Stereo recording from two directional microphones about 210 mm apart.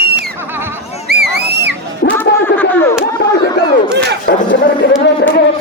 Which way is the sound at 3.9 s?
55° right (ahead or behind).